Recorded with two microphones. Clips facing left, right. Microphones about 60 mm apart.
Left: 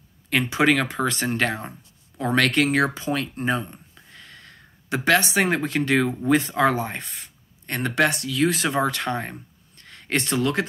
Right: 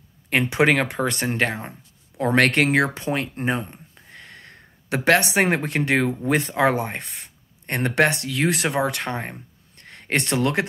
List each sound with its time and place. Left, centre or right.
0.3 s speech: right
2.1 s speech: right
3.1 s a sound: right
5.3 s speech: right
8.6 s speech: right
9.8 s a sound: right